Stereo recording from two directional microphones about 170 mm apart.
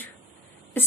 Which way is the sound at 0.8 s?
10° left (ahead or behind).